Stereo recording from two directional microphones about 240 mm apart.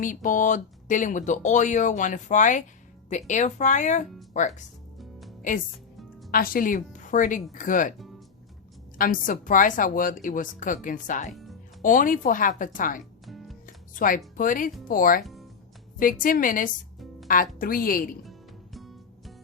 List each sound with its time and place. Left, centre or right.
0.0 s speech: left
9.0 s speech: left
13.2 s music: centre
13.7 s music: left
14.3 s speech: left
18.3 s music: centre